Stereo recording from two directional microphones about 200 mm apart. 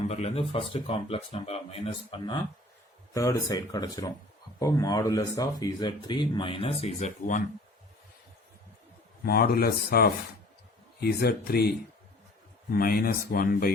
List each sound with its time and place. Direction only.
0.1 s speech: 30° left (ahead or behind)
9.2 s speech: 50° left (ahead or behind)
12.7 s speech: 50° left (ahead or behind)